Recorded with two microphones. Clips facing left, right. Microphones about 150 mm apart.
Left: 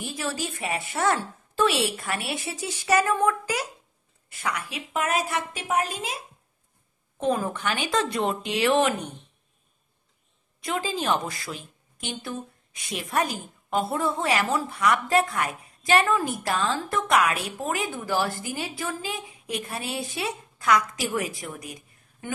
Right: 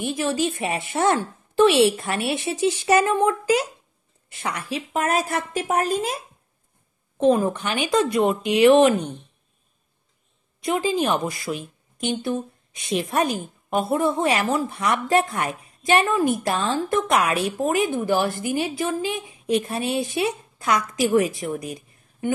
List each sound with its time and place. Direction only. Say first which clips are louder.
0.0 s a woman's voice: right 8 dB; 20° right (ahead or behind); by 6.2 s 45° right (ahead or behind)
7.2 s a woman's voice: right 7 dB; 25° right (ahead or behind)
10.6 s a woman's voice: right 6 dB; 20° right (ahead or behind)